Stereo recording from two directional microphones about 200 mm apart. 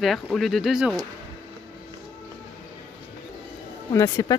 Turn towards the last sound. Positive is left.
turn(degrees=15)  # may be behind; listen again after turning